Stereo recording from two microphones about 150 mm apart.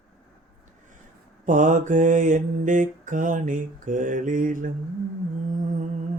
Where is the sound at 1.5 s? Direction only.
60° right (ahead or behind).